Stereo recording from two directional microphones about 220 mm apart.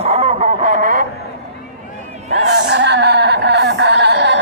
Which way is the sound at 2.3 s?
50° right (ahead or behind).